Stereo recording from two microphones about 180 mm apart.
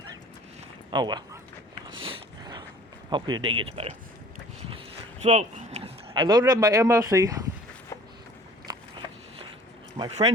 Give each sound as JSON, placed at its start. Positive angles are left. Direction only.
{"t": 0.9, "sound": "speech", "side_deg": -25}
{"t": 2.0, "sound": "a sound", "side_deg": -25}
{"t": 3.1, "sound": "speech", "side_deg": -25}
{"t": 5.2, "sound": "speech", "side_deg": -40}
{"t": 8.7, "sound": "biting", "side_deg": -25}
{"t": 10.0, "sound": "speech", "side_deg": -30}